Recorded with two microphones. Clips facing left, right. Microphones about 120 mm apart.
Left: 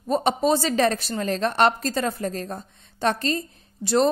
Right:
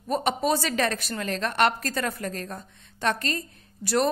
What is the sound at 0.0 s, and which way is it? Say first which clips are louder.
A woman's voice: left 4 dB; 30° left (ahead or behind).